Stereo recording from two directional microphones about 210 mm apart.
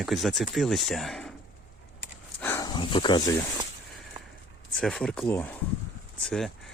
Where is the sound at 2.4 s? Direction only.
15° left (ahead or behind).